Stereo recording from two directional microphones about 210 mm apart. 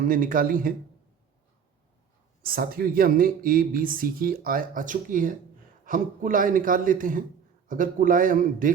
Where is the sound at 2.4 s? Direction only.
45° right (ahead or behind).